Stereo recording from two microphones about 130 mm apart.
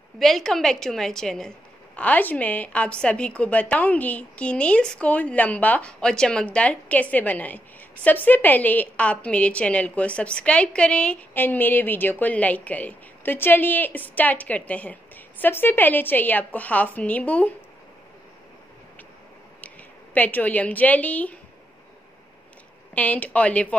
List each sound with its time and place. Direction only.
0.2 s a woman's voice: centre (ahead or behind)
20.2 s a woman's voice: 15° left (ahead or behind)
22.9 s a woman's voice: 10° left (ahead or behind)